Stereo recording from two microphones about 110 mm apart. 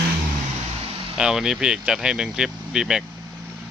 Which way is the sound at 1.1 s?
5° right (ahead or behind).